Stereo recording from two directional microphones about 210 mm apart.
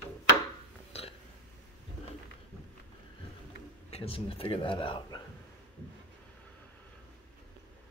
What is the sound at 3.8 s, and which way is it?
A man's voice, 30° left (ahead or behind).